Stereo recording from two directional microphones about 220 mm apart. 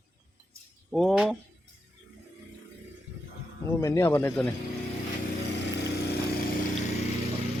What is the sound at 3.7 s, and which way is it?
Speech, 10° left (ahead or behind).